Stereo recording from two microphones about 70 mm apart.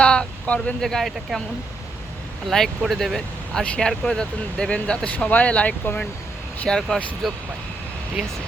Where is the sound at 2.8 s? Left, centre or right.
Centre.